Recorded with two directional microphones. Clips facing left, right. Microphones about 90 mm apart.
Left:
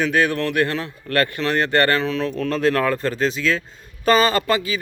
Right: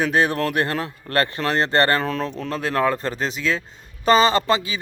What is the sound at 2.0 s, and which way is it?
Speech, 45° right (ahead or behind).